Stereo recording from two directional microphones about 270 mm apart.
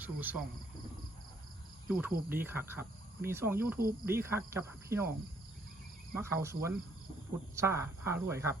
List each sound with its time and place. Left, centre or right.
0.0 s speech: centre
1.9 s cricket: centre
2.3 s speech: centre
6.1 s speech: centre